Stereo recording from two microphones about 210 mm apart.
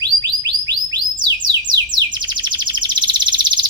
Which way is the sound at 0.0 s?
60° right (ahead or behind).